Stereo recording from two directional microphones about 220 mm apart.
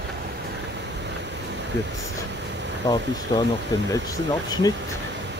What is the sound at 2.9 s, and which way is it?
Speech, 15° left (ahead or behind).